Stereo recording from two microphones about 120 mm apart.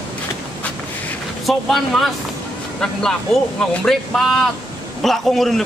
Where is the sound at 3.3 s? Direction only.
5° left (ahead or behind).